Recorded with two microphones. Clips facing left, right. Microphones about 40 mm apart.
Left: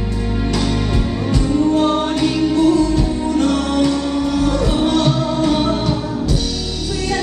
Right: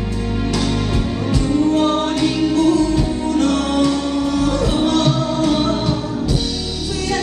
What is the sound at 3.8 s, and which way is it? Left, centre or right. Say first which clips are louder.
Music: even; left.